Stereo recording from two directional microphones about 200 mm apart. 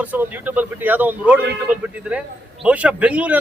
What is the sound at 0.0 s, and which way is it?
A man's voice, 10° right (ahead or behind).